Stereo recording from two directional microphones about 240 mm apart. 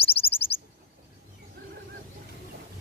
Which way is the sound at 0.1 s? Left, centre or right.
Left.